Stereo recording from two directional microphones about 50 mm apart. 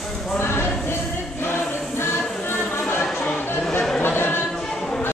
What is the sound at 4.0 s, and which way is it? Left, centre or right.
Chatter, left.